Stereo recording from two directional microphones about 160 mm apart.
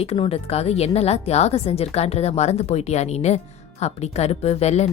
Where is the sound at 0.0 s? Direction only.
40° left (ahead or behind).